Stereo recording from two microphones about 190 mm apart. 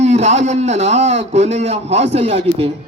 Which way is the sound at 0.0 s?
35° right (ahead or behind).